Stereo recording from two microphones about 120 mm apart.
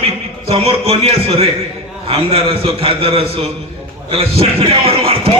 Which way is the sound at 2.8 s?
55° right (ahead or behind).